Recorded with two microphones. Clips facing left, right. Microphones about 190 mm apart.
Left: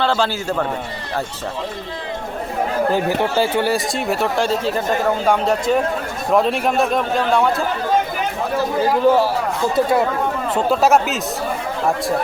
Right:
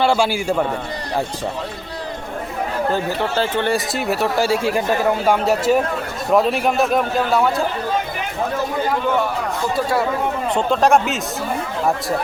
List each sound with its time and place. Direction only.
0.0 s speech: 10° right (ahead or behind)
2.9 s speech: 15° left (ahead or behind)
3.9 s a man's voice: centre (ahead or behind)
9.0 s a man's voice: 35° left (ahead or behind)
9.7 s speech: 20° left (ahead or behind)
10.5 s a man's voice: 5° left (ahead or behind)